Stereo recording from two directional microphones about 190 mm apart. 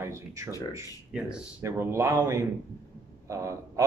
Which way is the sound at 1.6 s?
15° right (ahead or behind).